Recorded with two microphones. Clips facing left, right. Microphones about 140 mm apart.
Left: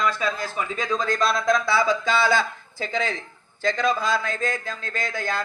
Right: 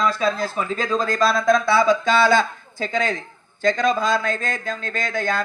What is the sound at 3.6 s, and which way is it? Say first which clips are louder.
Speech: right 4 dB; 20° right (ahead or behind).